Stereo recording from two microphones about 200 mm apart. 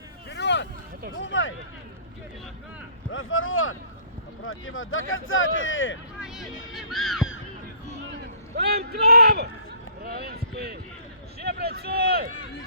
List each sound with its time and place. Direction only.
0.3 s vehicle: 60° left (ahead or behind)
1.1 s speech: 70° left (ahead or behind)
3.1 s speech: 90° left; by 6.0 s 75° left (ahead or behind)
6.2 s vehicle: centre (ahead or behind)
6.7 s a sound: centre (ahead or behind)
8.5 s a man's voice: 55° right (ahead or behind)